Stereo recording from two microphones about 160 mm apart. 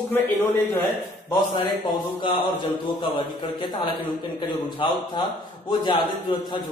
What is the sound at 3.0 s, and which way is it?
A man's voice, 30° left (ahead or behind).